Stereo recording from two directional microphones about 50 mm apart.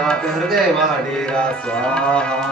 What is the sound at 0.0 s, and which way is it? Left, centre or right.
Speech, centre.